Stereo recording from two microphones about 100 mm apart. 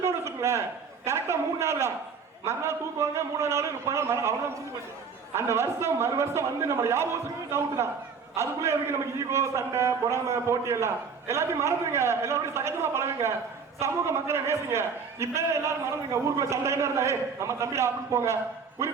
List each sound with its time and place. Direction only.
0.0 s a man's voice: 25° right (ahead or behind)
8.4 s a man's voice: 25° right (ahead or behind)